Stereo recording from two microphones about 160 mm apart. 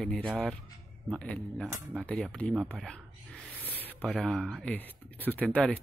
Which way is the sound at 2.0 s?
5° left (ahead or behind).